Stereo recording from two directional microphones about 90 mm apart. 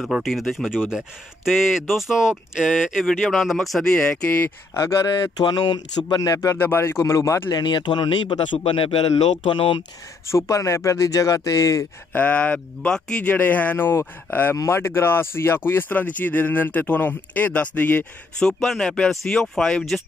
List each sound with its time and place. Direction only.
0.0 s speech: 5° right (ahead or behind); by 4.5 s 15° left (ahead or behind)
4.7 s speech: 35° left (ahead or behind)
5.9 s speech: 50° left (ahead or behind); by 7.5 s 30° left (ahead or behind)
7.5 s a man's voice: 55° left (ahead or behind); by 9.0 s 90° left
9.1 s a man's voice: 60° left (ahead or behind)
10.2 s speech: 30° left (ahead or behind)
12.1 s speech: 20° left (ahead or behind)
18.4 s speech: 5° left (ahead or behind)